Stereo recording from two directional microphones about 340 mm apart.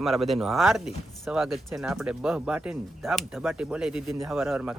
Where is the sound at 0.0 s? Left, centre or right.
Centre.